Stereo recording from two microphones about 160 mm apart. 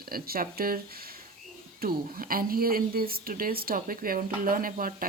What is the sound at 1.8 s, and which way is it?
Speech, 65° right (ahead or behind).